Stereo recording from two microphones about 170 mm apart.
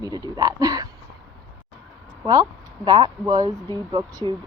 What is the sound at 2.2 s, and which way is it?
Speech, 20° right (ahead or behind).